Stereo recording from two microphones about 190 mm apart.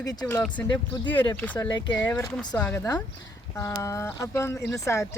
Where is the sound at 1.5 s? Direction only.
20° left (ahead or behind).